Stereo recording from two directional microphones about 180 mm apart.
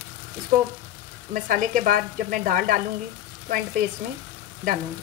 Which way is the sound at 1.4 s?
50° right (ahead or behind).